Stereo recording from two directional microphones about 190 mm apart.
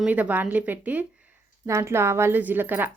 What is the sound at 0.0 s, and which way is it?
A woman's voice, 10° right (ahead or behind).